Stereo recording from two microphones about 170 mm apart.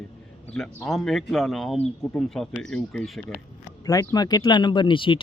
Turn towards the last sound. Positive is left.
turn(degrees=30)  # may be behind; listen again after turning